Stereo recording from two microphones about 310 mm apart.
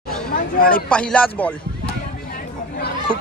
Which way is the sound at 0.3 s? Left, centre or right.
Left.